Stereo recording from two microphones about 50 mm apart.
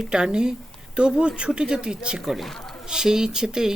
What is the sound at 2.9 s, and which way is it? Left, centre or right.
Speech, centre.